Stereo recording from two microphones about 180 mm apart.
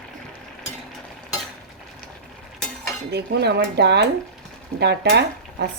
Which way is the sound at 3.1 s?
65° right (ahead or behind).